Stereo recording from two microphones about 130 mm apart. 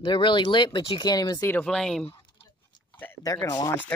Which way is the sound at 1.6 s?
5° left (ahead or behind).